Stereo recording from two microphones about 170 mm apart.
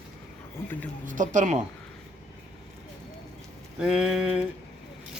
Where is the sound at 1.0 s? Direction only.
50° right (ahead or behind).